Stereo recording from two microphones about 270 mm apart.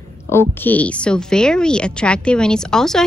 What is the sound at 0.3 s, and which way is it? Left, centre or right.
A woman's voice, centre.